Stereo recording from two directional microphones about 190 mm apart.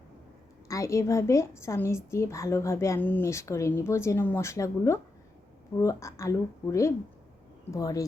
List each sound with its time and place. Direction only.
0.7 s a woman's voice: 15° left (ahead or behind)